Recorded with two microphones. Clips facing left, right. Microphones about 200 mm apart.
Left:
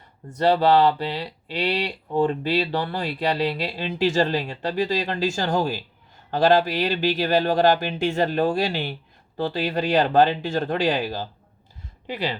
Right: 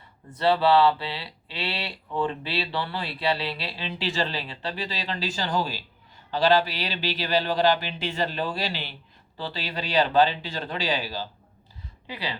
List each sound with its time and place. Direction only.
0.3 s speech: 45° left (ahead or behind)